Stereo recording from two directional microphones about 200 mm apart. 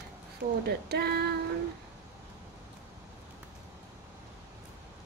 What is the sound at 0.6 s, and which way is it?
Speech, 55° right (ahead or behind).